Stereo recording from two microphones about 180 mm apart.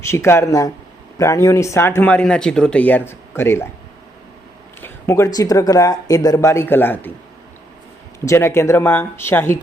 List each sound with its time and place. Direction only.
0.0 s speech: 15° left (ahead or behind)
4.8 s speech: 15° left (ahead or behind)
8.2 s speech: 15° left (ahead or behind)